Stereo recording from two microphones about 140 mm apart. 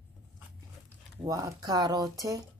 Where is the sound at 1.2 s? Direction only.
25° right (ahead or behind).